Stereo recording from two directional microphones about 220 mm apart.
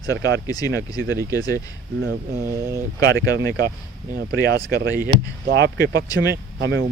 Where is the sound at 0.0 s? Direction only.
15° left (ahead or behind).